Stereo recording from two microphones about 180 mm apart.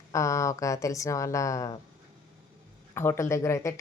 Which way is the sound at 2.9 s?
15° left (ahead or behind).